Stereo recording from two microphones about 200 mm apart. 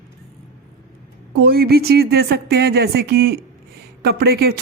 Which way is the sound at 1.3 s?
55° right (ahead or behind).